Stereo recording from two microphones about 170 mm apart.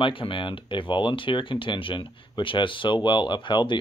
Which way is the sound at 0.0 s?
30° left (ahead or behind).